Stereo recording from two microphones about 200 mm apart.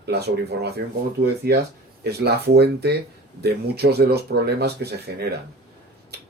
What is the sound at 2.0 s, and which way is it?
Speech, 55° right (ahead or behind).